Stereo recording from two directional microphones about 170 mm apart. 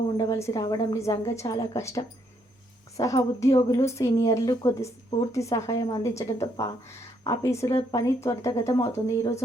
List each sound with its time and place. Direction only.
0.2 s speech: 15° left (ahead or behind)